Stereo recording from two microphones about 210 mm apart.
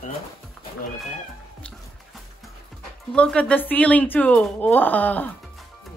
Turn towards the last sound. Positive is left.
turn(degrees=10)  # may be behind; listen again after turning